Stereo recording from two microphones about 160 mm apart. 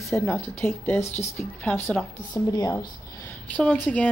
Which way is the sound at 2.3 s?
25° left (ahead or behind).